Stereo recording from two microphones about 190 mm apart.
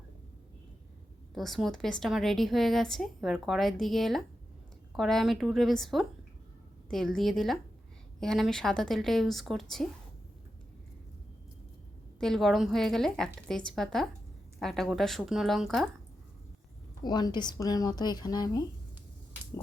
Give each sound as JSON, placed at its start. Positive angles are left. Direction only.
{"t": 1.3, "sound": "a woman's voice", "side_deg": 0}
{"t": 12.2, "sound": "a woman's voice", "side_deg": 0}
{"t": 17.0, "sound": "a woman's voice", "side_deg": 20}